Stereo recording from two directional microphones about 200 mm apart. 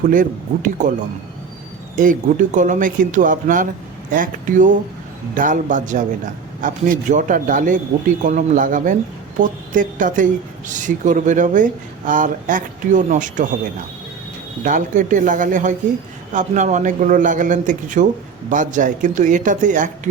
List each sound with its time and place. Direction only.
0.0 s speech: 40° right (ahead or behind)
2.0 s speech: 40° right (ahead or behind)
14.6 s speech: 40° right (ahead or behind)